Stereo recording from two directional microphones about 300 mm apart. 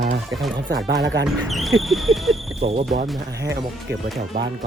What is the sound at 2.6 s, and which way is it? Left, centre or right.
Speech, centre.